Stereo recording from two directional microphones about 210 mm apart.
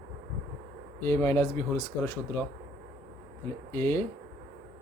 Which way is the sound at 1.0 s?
10° left (ahead or behind).